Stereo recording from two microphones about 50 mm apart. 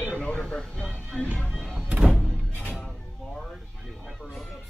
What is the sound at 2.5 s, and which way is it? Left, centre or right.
Music, left.